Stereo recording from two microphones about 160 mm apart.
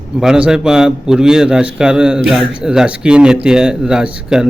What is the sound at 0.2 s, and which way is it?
A man's voice, 5° right (ahead or behind).